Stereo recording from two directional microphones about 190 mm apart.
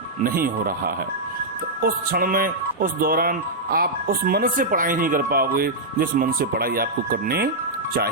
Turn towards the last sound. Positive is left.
turn(degrees=-55)  # may be behind; listen again after turning